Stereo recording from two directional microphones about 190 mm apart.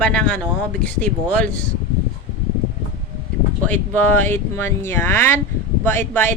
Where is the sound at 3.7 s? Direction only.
10° left (ahead or behind).